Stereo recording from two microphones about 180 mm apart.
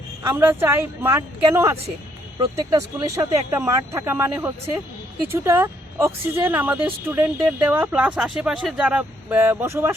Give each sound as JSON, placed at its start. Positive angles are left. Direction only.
{"t": 0.2, "sound": "speech", "side_deg": -10}